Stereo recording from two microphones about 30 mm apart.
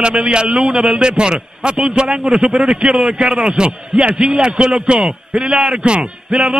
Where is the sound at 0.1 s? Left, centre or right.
Right.